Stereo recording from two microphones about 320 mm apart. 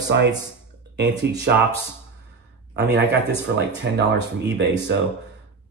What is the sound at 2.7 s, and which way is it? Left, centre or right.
Speech, right.